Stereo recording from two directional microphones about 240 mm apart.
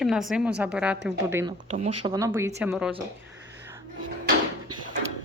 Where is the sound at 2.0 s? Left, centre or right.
Centre.